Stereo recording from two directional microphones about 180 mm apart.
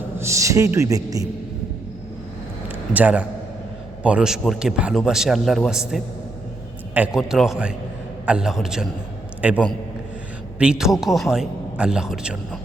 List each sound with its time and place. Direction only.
0.2 s a woman's voice: 15° right (ahead or behind)
2.6 s a sound: 10° right (ahead or behind)
4.0 s a man's voice: 5° right (ahead or behind)